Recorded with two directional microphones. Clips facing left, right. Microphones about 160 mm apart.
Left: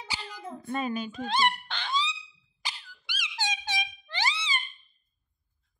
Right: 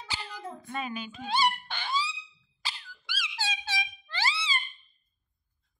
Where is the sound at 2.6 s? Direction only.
15° left (ahead or behind).